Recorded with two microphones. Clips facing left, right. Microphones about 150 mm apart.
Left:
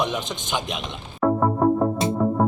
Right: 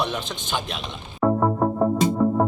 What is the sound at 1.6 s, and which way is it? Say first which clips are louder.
Music: left 4 dB; centre (ahead or behind).